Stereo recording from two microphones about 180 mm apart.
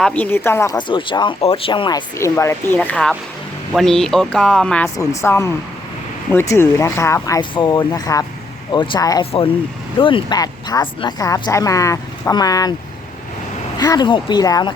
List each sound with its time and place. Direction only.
0.0 s speech: 10° left (ahead or behind)
0.8 s speech: 25° left (ahead or behind)
13.7 s speech: 20° left (ahead or behind)